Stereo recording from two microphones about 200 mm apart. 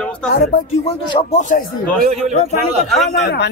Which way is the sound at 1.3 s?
40° left (ahead or behind).